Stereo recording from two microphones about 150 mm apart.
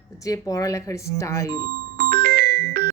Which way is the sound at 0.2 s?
20° left (ahead or behind).